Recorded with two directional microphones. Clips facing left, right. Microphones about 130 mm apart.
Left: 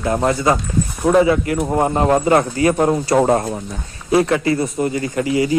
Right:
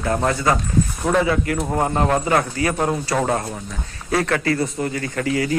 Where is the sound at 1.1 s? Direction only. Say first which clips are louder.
Left 7 dB; 20° left (ahead or behind).